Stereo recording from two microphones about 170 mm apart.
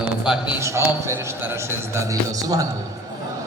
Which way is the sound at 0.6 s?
15° right (ahead or behind).